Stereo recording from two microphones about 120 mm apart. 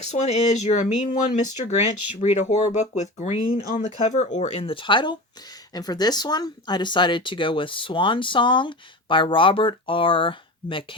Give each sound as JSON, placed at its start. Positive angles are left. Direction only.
{"t": 0.0, "sound": "speech", "side_deg": 75}
{"t": 2.4, "sound": "speech", "side_deg": 75}
{"t": 4.6, "sound": "speech", "side_deg": 45}